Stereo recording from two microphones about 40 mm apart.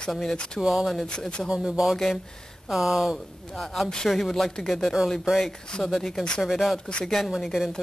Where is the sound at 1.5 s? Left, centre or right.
Centre.